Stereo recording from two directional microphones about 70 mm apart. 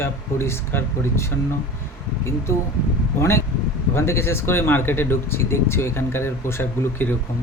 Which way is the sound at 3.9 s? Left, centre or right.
Left.